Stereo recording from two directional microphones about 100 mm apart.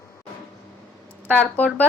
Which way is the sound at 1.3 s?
15° left (ahead or behind).